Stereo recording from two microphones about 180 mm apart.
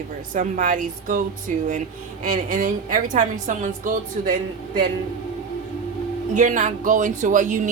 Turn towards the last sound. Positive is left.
turn(degrees=-45)  # may be behind; listen again after turning